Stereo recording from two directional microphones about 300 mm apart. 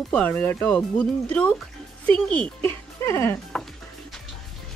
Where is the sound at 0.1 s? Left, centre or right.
Centre.